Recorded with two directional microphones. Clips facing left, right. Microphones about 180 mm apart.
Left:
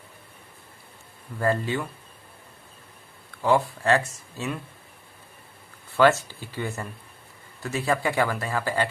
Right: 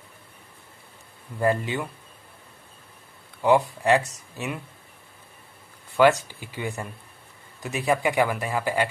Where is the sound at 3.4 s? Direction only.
15° right (ahead or behind).